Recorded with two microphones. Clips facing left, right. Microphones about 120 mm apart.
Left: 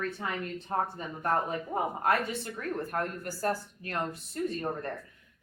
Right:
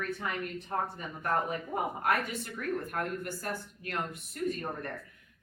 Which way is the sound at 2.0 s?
30° left (ahead or behind).